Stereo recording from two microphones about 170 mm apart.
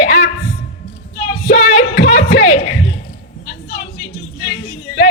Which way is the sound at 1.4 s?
45° left (ahead or behind).